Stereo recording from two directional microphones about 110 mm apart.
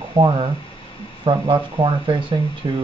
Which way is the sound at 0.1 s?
45° right (ahead or behind).